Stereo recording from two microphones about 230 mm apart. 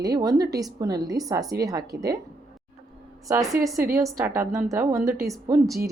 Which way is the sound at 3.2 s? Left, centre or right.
Centre.